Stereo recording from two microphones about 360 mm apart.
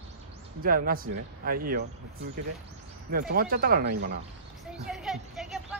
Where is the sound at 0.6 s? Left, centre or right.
Right.